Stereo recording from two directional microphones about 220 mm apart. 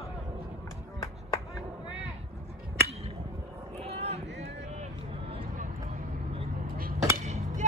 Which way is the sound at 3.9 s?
30° right (ahead or behind).